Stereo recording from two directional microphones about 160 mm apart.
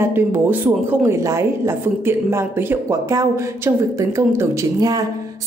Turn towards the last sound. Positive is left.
turn(degrees=-20)  # may be behind; listen again after turning